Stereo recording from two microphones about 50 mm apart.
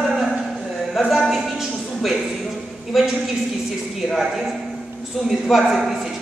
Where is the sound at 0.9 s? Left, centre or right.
Centre.